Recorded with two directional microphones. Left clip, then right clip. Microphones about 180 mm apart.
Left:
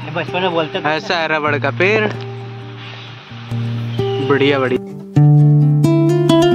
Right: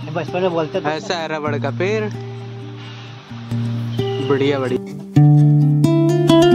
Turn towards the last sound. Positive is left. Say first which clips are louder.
# even
turn(degrees=0)  # may be behind; listen again after turning